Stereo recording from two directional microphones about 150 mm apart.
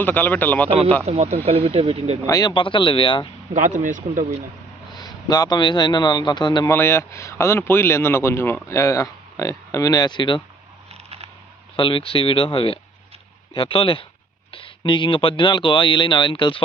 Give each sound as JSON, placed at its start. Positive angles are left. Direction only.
{"t": 0.0, "sound": "a man's voice", "side_deg": 10}
{"t": 1.0, "sound": "speech", "side_deg": -45}
{"t": 2.2, "sound": "speech", "side_deg": 25}
{"t": 3.5, "sound": "speech", "side_deg": -60}
{"t": 4.9, "sound": "a man's voice", "side_deg": 25}
{"t": 6.7, "sound": "speech", "side_deg": 20}
{"t": 11.8, "sound": "speech", "side_deg": 35}